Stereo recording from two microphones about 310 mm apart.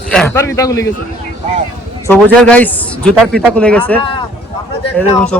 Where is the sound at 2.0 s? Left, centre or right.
Centre.